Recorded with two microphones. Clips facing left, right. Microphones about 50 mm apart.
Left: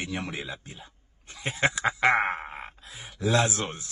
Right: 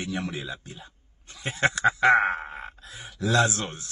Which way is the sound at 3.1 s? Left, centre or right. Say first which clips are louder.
Even; left.